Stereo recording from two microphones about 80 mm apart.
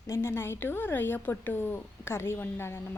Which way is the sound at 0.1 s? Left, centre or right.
Left.